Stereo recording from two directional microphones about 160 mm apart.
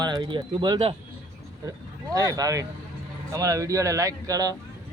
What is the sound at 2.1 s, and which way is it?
A man's voice, 20° right (ahead or behind).